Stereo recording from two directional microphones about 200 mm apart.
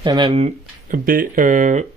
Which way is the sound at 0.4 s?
45° right (ahead or behind).